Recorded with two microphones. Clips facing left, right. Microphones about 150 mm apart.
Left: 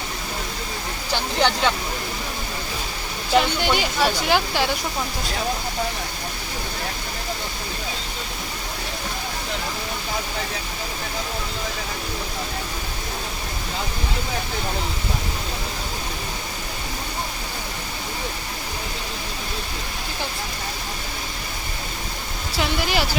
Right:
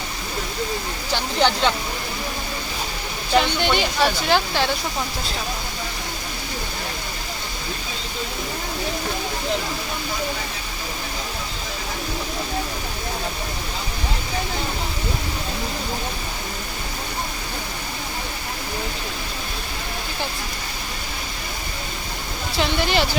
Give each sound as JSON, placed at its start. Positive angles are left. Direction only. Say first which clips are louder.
{"t": 1.1, "sound": "speech", "louder": "right 1 dB", "side_deg": -15}
{"t": 3.3, "sound": "speech", "louder": "even", "side_deg": 5}
{"t": 22.5, "sound": "speech", "louder": "right 2 dB", "side_deg": 5}